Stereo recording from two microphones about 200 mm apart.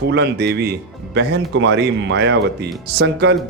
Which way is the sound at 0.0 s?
55° right (ahead or behind).